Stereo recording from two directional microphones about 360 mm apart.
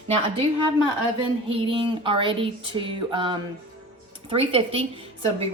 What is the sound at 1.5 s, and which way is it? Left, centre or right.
A woman's voice, centre.